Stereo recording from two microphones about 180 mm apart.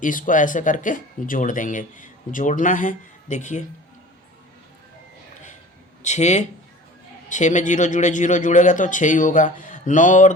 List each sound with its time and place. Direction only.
0.0 s speech: 50° left (ahead or behind)
6.0 s speech: 40° left (ahead or behind)